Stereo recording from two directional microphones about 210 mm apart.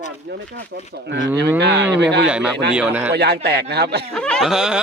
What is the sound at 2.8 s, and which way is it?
Speech, 5° right (ahead or behind).